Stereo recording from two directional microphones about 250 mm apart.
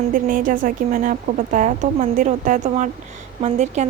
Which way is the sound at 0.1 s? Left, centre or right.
Right.